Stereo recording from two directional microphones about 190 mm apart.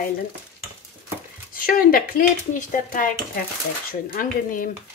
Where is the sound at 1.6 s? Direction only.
50° left (ahead or behind).